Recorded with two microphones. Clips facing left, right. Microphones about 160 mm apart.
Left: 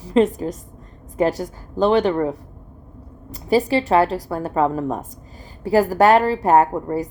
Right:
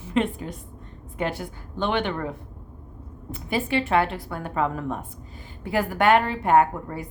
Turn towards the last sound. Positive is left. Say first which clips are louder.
# left 4 dB
turn(degrees=35)  # may be behind; listen again after turning